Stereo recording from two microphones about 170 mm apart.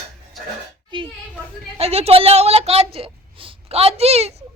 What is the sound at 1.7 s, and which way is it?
A woman's voice, 35° right (ahead or behind).